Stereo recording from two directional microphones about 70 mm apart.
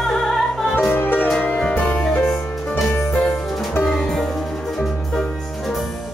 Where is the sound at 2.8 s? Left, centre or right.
Left.